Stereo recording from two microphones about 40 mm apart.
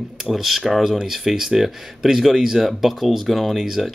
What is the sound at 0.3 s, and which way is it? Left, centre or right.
Speech, centre.